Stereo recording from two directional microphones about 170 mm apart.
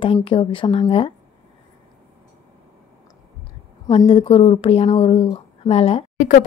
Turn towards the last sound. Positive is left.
turn(degrees=50)  # may be behind; listen again after turning